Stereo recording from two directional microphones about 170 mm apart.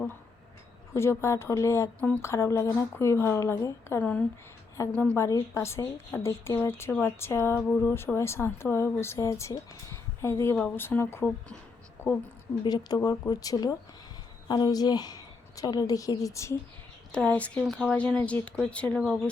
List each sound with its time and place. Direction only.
0.9 s speech: 15° left (ahead or behind)
12.6 s a woman's voice: 25° left (ahead or behind)
17.1 s speech: 5° left (ahead or behind)